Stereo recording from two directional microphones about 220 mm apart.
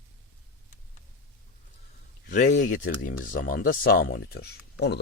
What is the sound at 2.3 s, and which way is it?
Speech, 45° left (ahead or behind).